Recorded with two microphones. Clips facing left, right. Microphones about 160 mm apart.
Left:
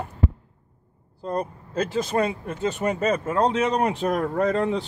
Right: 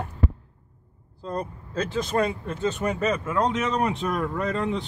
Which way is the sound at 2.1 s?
10° left (ahead or behind).